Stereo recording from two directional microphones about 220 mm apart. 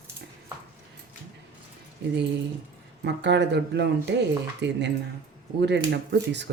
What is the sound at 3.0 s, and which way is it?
Speech, 55° right (ahead or behind).